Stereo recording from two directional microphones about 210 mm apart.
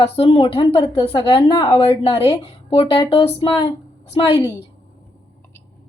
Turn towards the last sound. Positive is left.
turn(degrees=25)  # may be behind; listen again after turning